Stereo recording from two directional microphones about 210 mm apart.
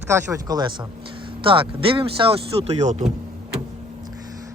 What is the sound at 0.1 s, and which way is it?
A man's voice, 15° right (ahead or behind).